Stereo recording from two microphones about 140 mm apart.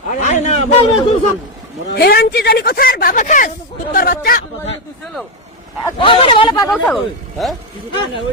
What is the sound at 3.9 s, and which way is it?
Speech, 90° left.